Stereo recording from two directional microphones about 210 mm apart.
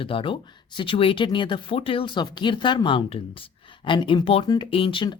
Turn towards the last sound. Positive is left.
turn(degrees=25)  # may be behind; listen again after turning